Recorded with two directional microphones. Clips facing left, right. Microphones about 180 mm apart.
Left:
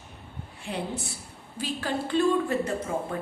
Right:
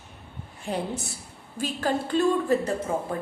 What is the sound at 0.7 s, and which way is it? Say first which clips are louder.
A woman's voice: right 3 dB; 40° right (ahead or behind).